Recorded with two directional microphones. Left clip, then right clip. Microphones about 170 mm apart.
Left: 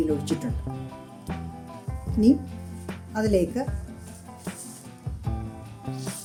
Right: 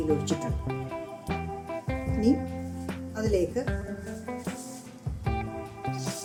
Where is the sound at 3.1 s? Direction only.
45° left (ahead or behind).